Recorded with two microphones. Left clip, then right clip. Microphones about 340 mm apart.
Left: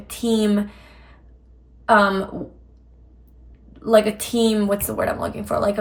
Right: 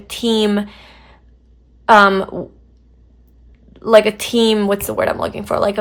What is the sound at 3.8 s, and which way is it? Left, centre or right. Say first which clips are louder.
A woman's voice: right 6 dB; centre.